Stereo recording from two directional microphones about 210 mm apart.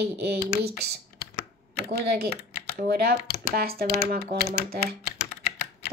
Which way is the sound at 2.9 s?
45° right (ahead or behind).